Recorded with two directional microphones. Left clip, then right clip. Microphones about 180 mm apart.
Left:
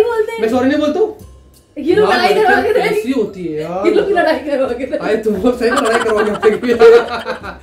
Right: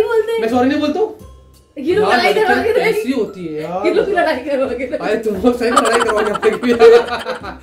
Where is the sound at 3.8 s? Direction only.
5° left (ahead or behind).